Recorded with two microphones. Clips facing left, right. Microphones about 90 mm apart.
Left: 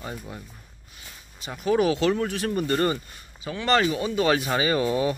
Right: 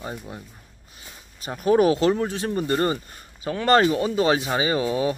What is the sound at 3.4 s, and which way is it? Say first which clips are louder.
Speech: right 4 dB; 40° right (ahead or behind).